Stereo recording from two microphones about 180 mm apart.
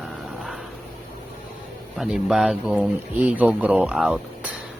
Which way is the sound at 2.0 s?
5° right (ahead or behind).